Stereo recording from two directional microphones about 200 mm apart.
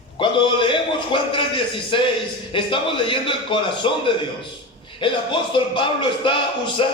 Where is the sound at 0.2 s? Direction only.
25° left (ahead or behind).